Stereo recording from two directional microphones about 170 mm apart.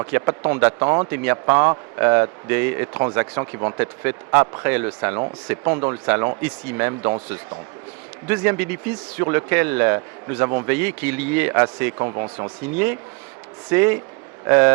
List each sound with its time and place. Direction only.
0.1 s speech: 15° right (ahead or behind)
11.9 s speech: 25° right (ahead or behind)
12.7 s speech: 10° right (ahead or behind)